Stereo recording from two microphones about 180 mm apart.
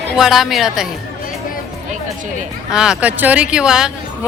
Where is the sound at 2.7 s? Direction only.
5° right (ahead or behind).